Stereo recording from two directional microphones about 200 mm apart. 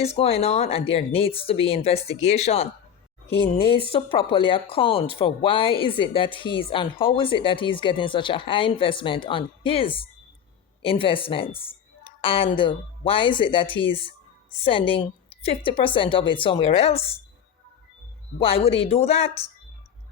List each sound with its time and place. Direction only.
0.0 s speech: 30° left (ahead or behind)
18.3 s speech: 30° left (ahead or behind)